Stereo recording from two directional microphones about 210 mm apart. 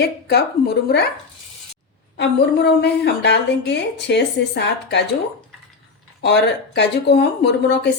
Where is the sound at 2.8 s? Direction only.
50° left (ahead or behind).